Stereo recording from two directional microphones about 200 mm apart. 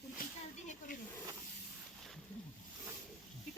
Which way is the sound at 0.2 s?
45° left (ahead or behind).